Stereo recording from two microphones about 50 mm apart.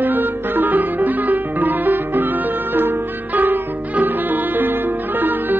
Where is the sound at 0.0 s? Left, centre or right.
Right.